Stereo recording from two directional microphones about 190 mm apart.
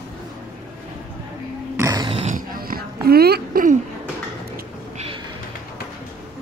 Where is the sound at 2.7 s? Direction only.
55° right (ahead or behind).